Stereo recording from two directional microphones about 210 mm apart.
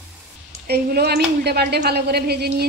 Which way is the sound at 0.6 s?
50° right (ahead or behind).